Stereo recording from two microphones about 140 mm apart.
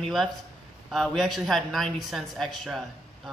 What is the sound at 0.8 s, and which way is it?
Speech, centre (ahead or behind).